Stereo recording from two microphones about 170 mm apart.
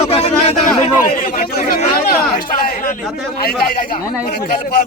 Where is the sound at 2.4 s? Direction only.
60° left (ahead or behind).